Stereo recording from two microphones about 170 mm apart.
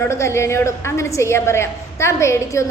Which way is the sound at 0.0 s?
15° left (ahead or behind).